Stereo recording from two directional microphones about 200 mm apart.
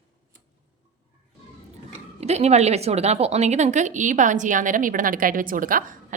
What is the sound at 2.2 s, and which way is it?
A woman's voice, 35° right (ahead or behind).